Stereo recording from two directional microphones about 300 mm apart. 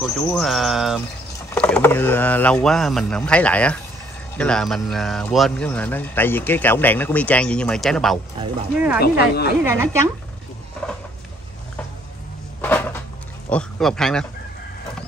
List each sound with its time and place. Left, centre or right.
0.3 s a man's voice: centre
9.0 s speech: left
9.6 s a woman's voice: centre
12.6 s cupboard open or close: centre
13.5 s speech: centre